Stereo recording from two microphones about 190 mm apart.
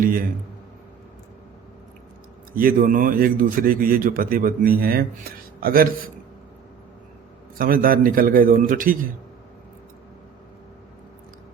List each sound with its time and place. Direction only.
2.6 s a man's voice: 50° right (ahead or behind)
7.6 s a man's voice: 50° right (ahead or behind)